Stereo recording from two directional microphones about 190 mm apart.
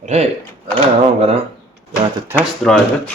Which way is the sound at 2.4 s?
5° left (ahead or behind).